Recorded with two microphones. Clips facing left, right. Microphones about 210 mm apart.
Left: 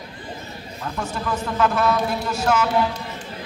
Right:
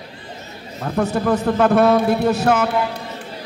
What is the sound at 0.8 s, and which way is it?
Speech, 40° right (ahead or behind).